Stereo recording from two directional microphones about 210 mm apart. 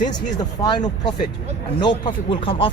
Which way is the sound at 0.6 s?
20° left (ahead or behind).